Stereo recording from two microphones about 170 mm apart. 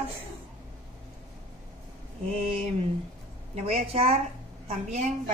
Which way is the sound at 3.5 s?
40° right (ahead or behind).